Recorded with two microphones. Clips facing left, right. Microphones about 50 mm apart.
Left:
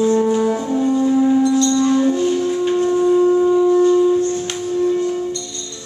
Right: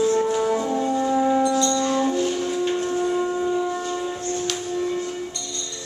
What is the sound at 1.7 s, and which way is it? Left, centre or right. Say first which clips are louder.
Music: left 6 dB; centre.